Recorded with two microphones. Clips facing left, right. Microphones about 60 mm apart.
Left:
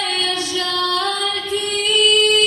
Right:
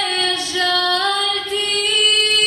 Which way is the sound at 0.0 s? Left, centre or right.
Right.